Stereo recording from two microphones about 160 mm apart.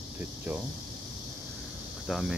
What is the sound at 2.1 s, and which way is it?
Speech, centre (ahead or behind).